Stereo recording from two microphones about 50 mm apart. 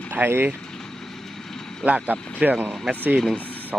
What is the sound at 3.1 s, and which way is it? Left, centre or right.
Speech, centre.